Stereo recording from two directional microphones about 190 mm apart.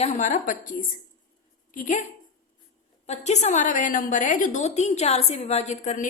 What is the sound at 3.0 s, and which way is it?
A woman's voice, 35° left (ahead or behind).